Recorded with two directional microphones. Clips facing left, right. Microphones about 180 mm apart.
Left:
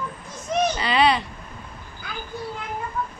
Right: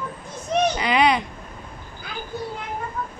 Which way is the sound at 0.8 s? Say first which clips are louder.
Right 1 dB; 15° right (ahead or behind).